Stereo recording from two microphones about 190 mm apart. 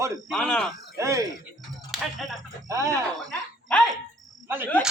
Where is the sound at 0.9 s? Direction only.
15° right (ahead or behind).